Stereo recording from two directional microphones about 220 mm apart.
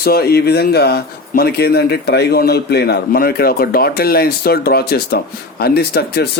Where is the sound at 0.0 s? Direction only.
45° left (ahead or behind).